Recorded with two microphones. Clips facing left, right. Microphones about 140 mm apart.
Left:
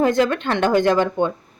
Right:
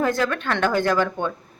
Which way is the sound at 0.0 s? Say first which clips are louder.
Left 5 dB; 20° left (ahead or behind).